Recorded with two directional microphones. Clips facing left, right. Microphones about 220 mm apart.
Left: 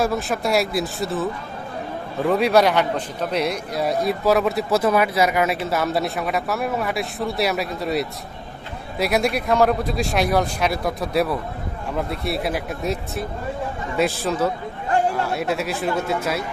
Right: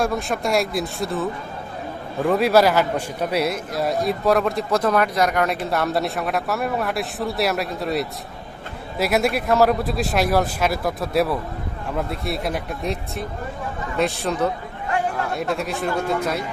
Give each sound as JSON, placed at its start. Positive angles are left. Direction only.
{"t": 0.0, "sound": "a man's voice", "side_deg": 0}